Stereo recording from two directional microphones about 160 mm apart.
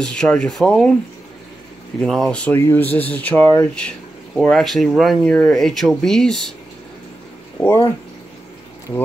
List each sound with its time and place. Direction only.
0.0 s speech: 5° left (ahead or behind)
2.0 s speech: centre (ahead or behind)
7.6 s speech: 15° left (ahead or behind)